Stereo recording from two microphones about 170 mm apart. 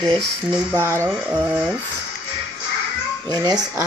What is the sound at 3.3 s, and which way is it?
Speech, 25° right (ahead or behind).